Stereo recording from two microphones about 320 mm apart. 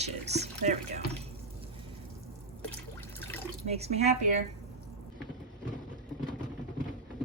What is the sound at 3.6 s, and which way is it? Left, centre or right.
Speech, centre.